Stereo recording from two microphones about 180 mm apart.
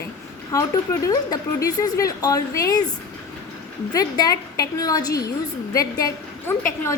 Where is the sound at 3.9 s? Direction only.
20° left (ahead or behind).